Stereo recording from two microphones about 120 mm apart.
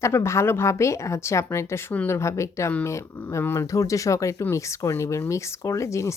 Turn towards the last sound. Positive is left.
turn(degrees=25)  # may be behind; listen again after turning